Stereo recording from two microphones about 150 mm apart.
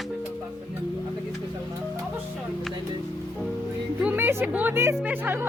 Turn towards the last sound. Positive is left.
turn(degrees=-15)  # may be behind; listen again after turning